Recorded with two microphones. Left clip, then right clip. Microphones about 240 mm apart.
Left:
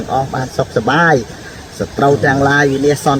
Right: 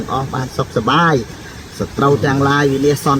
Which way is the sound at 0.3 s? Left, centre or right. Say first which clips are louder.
Left 3 dB; centre.